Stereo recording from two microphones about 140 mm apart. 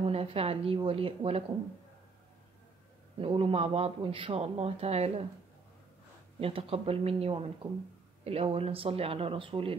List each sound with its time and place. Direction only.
0.0 s a man's voice: 45° right (ahead or behind)
3.2 s a man's voice: 40° right (ahead or behind)
6.4 s a man's voice: 45° right (ahead or behind)